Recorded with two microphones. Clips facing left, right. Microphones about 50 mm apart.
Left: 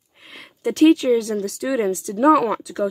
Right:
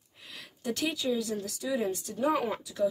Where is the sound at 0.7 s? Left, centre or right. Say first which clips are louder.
Left 16 dB; left.